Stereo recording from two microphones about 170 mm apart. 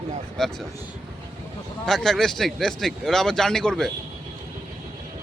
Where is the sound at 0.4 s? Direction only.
5° left (ahead or behind).